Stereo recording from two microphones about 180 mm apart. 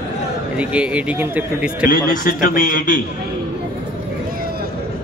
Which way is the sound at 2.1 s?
50° left (ahead or behind).